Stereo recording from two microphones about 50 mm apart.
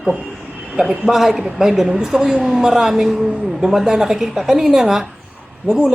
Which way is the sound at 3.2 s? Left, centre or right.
Right.